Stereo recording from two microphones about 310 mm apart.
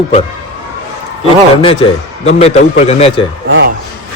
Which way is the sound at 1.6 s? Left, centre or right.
Centre.